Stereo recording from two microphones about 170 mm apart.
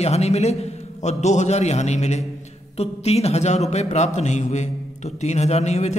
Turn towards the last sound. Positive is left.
turn(degrees=40)  # may be behind; listen again after turning